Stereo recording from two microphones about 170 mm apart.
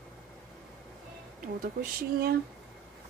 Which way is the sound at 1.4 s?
55° right (ahead or behind).